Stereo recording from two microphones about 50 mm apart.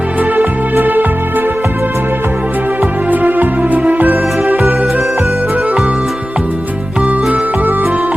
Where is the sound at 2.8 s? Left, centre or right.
Right.